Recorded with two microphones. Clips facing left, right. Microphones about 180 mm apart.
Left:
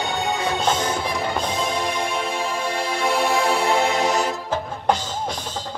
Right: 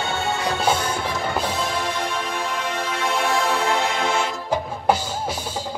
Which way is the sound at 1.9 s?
15° left (ahead or behind).